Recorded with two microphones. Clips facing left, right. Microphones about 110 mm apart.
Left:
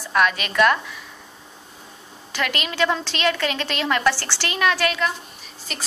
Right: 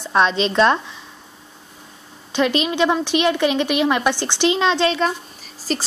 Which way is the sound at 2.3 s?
20° right (ahead or behind).